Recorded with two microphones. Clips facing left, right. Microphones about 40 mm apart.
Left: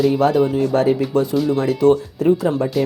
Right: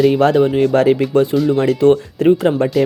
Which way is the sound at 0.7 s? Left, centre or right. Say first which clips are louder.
Right 3 dB; right.